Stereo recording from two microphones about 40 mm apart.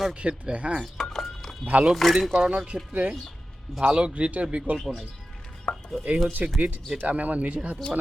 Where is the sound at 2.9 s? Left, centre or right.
Right.